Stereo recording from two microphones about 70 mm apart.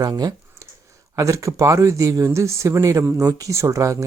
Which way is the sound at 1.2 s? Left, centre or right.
Right.